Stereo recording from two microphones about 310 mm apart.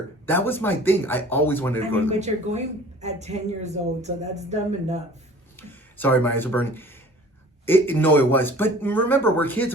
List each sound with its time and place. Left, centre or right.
0.3 s speech: centre
2.0 s speech: right
5.5 s speech: centre